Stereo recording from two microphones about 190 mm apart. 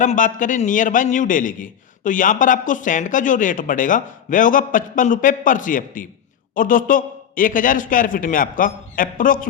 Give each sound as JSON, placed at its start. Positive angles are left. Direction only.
{"t": 0.0, "sound": "a man's voice", "side_deg": 40}